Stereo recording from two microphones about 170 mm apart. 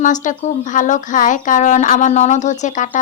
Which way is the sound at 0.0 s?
50° left (ahead or behind).